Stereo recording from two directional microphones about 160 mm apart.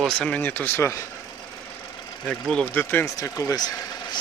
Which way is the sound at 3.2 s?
20° left (ahead or behind).